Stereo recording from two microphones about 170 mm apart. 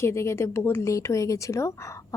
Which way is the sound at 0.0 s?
15° left (ahead or behind).